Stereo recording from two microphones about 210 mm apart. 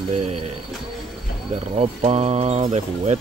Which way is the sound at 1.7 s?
30° right (ahead or behind).